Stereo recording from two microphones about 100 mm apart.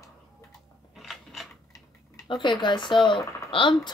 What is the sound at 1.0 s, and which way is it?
Scissors, centre (ahead or behind).